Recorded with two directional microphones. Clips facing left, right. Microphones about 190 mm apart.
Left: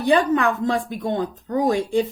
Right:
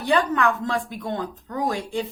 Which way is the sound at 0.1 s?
20° left (ahead or behind).